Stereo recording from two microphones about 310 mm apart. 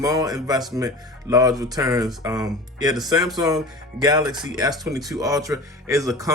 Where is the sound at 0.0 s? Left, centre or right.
Centre.